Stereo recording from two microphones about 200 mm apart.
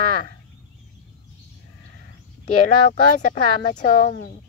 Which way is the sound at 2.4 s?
40° left (ahead or behind).